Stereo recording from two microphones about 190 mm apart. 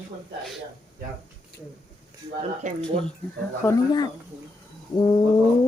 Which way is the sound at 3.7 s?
20° left (ahead or behind).